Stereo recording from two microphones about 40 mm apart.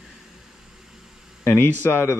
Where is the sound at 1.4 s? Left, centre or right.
Left.